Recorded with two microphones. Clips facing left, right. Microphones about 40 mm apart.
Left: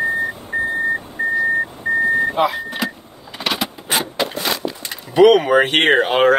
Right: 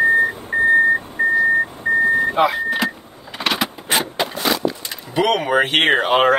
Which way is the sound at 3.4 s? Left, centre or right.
Right.